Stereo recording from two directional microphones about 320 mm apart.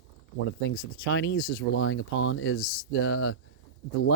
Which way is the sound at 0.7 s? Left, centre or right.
Left.